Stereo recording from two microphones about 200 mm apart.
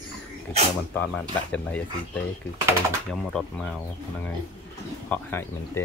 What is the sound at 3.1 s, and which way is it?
Speech, 5° left (ahead or behind).